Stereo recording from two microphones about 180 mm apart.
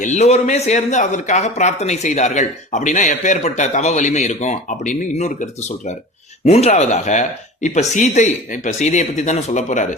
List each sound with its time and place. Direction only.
0.0 s a man's voice: 40° left (ahead or behind)